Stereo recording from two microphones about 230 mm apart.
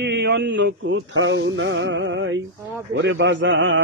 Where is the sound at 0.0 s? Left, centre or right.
Right.